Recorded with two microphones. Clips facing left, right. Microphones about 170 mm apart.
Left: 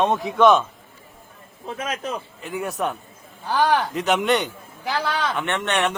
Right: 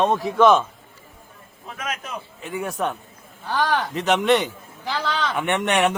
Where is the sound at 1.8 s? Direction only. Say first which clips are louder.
Left 3 dB; 30° left (ahead or behind).